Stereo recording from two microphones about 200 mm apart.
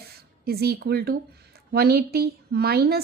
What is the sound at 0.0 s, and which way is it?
A woman's voice, 50° right (ahead or behind).